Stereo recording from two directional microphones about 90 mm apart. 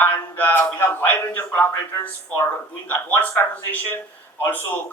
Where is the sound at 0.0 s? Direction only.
20° left (ahead or behind).